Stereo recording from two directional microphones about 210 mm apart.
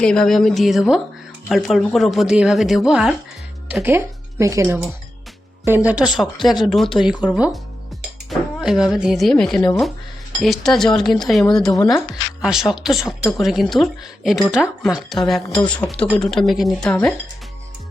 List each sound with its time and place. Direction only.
0.0 s speech: 5° left (ahead or behind)
11.7 s speech: 15° left (ahead or behind)
12.4 s speech: 5° right (ahead or behind)